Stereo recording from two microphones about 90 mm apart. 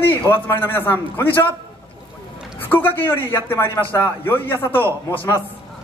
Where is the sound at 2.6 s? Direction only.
20° left (ahead or behind).